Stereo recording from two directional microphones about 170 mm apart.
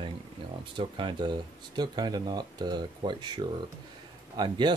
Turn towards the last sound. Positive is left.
turn(degrees=-25)  # may be behind; listen again after turning